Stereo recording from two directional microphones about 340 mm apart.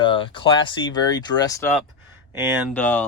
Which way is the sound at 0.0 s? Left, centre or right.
Centre.